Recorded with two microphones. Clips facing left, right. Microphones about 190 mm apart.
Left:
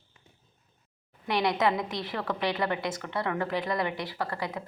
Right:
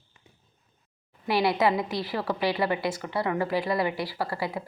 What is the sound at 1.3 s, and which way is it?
A woman's voice, 5° right (ahead or behind).